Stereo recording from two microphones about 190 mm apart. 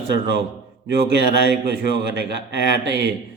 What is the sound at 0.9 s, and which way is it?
Speech, 60° right (ahead or behind).